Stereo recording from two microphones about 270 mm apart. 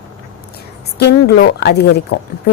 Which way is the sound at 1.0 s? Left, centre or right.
Left.